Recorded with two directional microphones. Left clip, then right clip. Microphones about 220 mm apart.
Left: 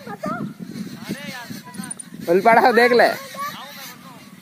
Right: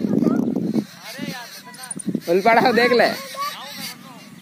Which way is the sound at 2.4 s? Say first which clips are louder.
Left 2 dB; 10° left (ahead or behind).